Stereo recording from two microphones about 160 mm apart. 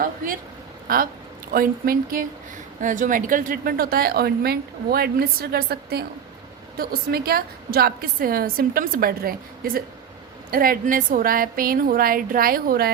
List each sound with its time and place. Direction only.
0.9 s a woman's voice: 65° right (ahead or behind)